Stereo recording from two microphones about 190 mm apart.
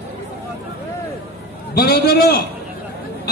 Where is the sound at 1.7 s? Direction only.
55° left (ahead or behind).